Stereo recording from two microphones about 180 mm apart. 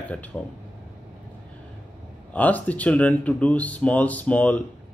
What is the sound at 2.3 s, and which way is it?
Speech, 10° left (ahead or behind).